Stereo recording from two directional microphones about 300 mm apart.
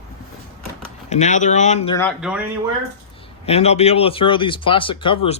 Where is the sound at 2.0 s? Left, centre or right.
Centre.